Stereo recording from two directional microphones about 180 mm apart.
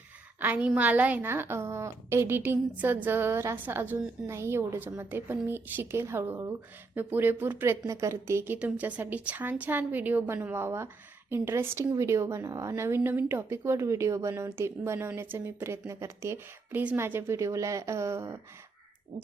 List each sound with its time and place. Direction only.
0.3 s a woman's voice: 10° right (ahead or behind)